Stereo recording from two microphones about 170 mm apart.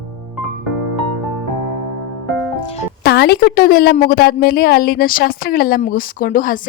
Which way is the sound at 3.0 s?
75° left (ahead or behind).